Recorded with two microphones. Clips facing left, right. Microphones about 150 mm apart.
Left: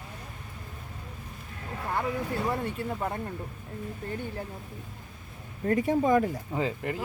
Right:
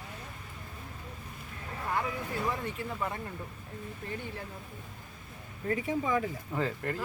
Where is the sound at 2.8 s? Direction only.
35° left (ahead or behind).